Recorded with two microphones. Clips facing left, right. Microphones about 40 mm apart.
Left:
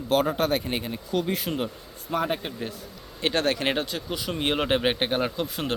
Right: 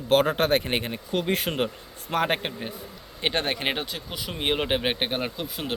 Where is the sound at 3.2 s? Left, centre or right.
Right.